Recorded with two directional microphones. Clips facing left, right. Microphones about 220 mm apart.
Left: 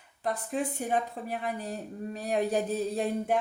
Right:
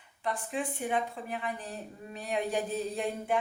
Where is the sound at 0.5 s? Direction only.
40° left (ahead or behind).